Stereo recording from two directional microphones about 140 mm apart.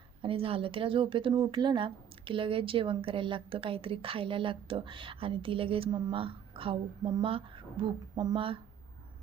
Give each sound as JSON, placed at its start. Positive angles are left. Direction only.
{"t": 0.2, "sound": "a woman's voice", "side_deg": -40}